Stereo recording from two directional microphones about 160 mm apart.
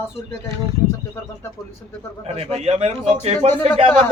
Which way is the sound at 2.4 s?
40° right (ahead or behind).